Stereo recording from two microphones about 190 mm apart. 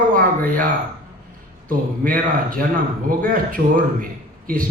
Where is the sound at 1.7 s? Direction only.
45° right (ahead or behind).